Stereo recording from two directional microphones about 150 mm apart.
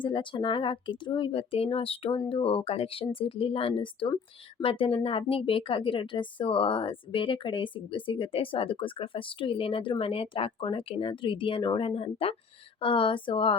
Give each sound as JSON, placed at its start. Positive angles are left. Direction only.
{"t": 0.0, "sound": "a woman's voice", "side_deg": 35}